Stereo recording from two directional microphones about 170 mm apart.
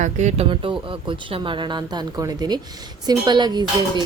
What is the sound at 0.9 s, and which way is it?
Speech, 30° right (ahead or behind).